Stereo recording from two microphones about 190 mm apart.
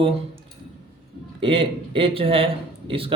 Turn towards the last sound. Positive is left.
turn(degrees=-30)  # may be behind; listen again after turning